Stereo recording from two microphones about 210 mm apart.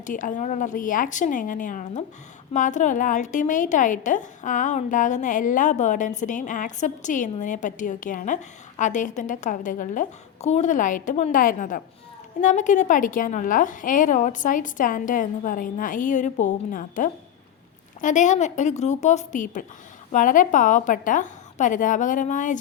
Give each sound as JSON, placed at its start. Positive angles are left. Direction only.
{"t": 0.0, "sound": "a woman's voice", "side_deg": 40}